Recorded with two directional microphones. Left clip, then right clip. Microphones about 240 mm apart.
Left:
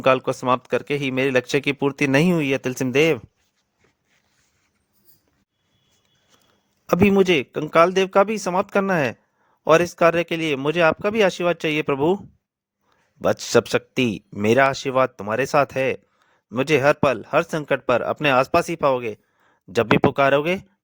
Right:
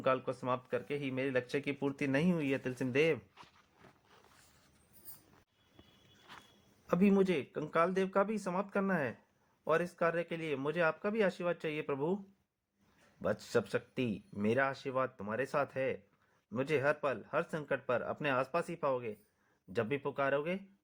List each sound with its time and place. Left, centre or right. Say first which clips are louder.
0.0 s a man's voice: left 15 dB; left
6.8 s a man's voice: left 14 dB; left
13.2 s a man's voice: left 15 dB; left